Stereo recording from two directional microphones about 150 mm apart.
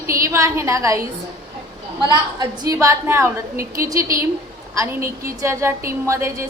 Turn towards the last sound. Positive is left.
turn(degrees=-20)  # may be behind; listen again after turning